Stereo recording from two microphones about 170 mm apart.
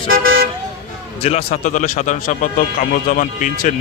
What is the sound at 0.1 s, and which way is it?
Vehicle, 60° right (ahead or behind).